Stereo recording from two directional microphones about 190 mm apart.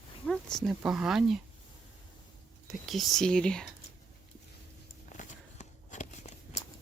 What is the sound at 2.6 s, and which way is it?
Speech, centre (ahead or behind).